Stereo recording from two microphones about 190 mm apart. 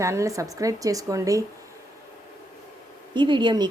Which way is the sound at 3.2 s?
25° right (ahead or behind).